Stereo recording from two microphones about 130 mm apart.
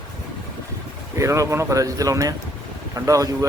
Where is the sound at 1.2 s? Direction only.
25° right (ahead or behind).